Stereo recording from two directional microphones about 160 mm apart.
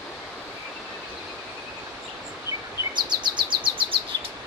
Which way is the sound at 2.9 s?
30° right (ahead or behind).